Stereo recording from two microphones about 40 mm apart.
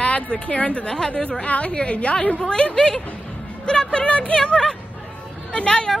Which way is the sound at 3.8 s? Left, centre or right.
Left.